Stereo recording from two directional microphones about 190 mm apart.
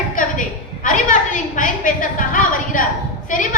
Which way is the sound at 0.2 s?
45° left (ahead or behind).